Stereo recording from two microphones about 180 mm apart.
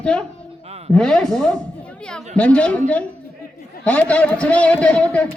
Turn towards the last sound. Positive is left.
turn(degrees=5)  # may be behind; listen again after turning